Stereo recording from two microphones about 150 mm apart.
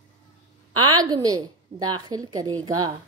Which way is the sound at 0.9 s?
25° right (ahead or behind).